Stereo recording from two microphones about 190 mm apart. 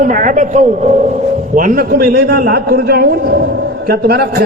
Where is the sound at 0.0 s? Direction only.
45° right (ahead or behind).